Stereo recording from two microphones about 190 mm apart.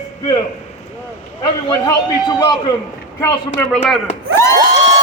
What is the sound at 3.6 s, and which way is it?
Speech, 5° left (ahead or behind).